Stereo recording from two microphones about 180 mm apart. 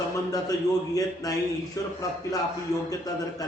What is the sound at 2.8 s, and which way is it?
Speech, 20° left (ahead or behind).